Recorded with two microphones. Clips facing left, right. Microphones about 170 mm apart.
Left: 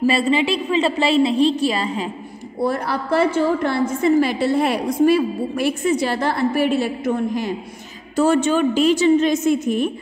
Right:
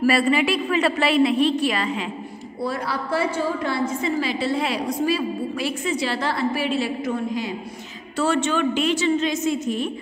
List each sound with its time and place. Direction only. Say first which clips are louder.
0.0 s a woman's voice: left 1 dB; 25° left (ahead or behind)
2.6 s a woman's voice: left 5 dB; 50° left (ahead or behind)
8.2 s a woman's voice: left 5 dB; 45° left (ahead or behind)